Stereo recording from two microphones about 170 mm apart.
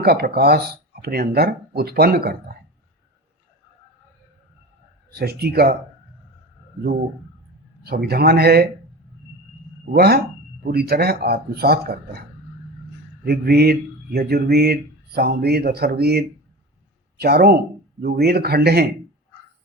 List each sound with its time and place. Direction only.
0.0 s speech: 70° right (ahead or behind)
5.1 s speech: 65° right (ahead or behind)
7.9 s speech: 65° right (ahead or behind)
9.9 s speech: 65° right (ahead or behind)
13.2 s speech: 70° right (ahead or behind)